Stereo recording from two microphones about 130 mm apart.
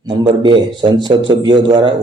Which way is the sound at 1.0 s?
35° right (ahead or behind).